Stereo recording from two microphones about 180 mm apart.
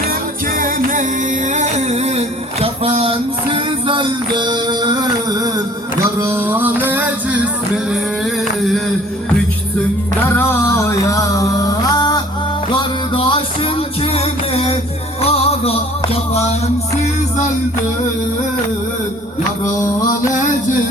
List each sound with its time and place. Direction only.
0.6 s music: 50° right (ahead or behind); by 7.4 s 10° right (ahead or behind)
10.3 s music: 15° left (ahead or behind); by 16.6 s 35° left (ahead or behind)